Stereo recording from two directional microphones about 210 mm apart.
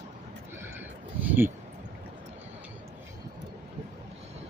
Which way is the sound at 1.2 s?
5° right (ahead or behind).